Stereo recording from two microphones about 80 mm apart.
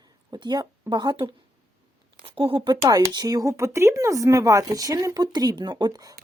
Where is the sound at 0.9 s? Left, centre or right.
Right.